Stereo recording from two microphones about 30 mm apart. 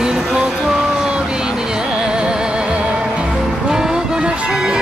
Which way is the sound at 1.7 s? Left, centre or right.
Right.